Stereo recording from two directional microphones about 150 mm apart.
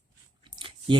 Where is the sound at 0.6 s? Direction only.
35° right (ahead or behind).